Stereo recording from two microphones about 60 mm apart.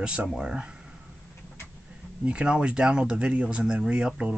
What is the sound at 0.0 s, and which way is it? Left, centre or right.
Speech, centre.